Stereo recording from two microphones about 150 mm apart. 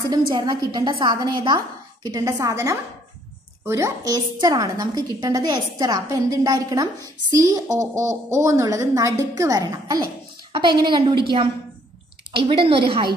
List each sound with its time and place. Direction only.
0.3 s a woman's voice: 25° right (ahead or behind)